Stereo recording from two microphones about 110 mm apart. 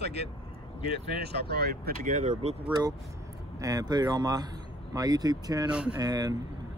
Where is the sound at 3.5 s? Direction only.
35° right (ahead or behind).